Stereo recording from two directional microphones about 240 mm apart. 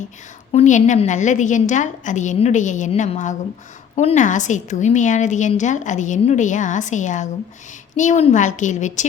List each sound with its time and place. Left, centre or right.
0.5 s a woman's voice: left